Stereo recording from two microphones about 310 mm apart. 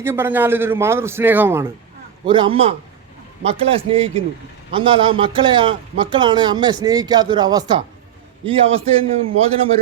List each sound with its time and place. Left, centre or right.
0.0 s a man's voice: centre